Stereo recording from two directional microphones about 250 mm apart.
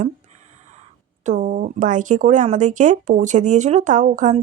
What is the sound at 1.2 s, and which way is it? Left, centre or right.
Speech, right.